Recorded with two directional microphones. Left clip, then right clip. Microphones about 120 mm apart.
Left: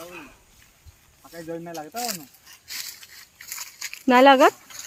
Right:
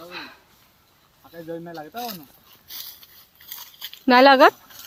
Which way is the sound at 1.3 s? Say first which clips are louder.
Even; 35° left (ahead or behind).